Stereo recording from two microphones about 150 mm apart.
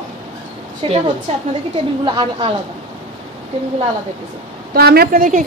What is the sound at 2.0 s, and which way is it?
Speech, 30° right (ahead or behind).